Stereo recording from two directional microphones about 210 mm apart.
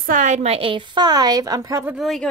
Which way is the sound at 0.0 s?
40° right (ahead or behind).